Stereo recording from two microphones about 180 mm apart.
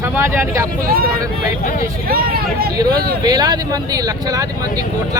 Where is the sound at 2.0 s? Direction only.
55° right (ahead or behind).